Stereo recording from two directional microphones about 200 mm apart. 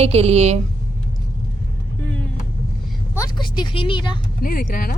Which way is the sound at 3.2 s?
20° left (ahead or behind).